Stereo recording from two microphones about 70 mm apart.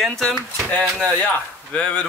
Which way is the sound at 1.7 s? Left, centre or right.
Centre.